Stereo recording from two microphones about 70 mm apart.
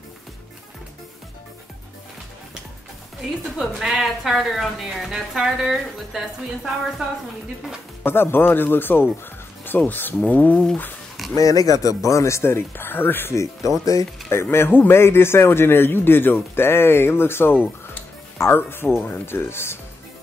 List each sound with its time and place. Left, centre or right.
3.7 s speech: centre
8.0 s a man's voice: left
11.3 s a man's voice: left